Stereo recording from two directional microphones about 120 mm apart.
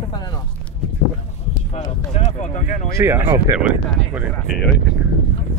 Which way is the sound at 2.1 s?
75° left (ahead or behind).